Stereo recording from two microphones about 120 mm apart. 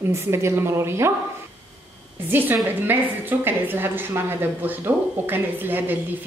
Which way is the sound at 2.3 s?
15° right (ahead or behind).